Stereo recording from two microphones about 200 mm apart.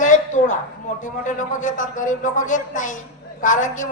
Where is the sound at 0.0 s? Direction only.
40° left (ahead or behind).